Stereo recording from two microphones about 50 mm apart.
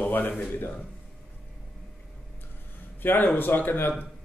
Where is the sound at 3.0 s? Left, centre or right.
Left.